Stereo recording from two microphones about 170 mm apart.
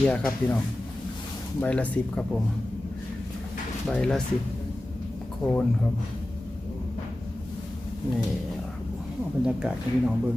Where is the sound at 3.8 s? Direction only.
5° left (ahead or behind).